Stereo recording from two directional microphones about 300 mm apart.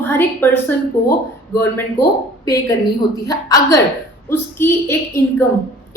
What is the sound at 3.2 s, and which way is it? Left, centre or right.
A woman's voice, centre.